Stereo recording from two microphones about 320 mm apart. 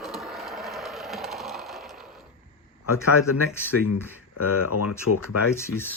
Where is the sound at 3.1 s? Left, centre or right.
Left.